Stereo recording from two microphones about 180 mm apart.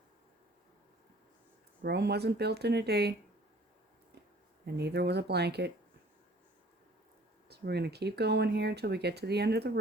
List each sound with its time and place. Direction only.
1.8 s speech: 65° right (ahead or behind)
4.6 s speech: 65° right (ahead or behind)
7.4 s speech: 65° right (ahead or behind)